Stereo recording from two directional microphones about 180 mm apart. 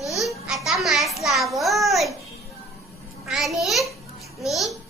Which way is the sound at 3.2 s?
Centre (ahead or behind).